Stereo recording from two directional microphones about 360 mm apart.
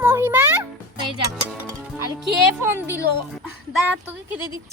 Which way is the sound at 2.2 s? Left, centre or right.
Centre.